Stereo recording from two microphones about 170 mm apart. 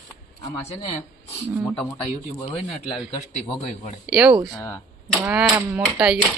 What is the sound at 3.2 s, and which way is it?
Speech, 40° left (ahead or behind).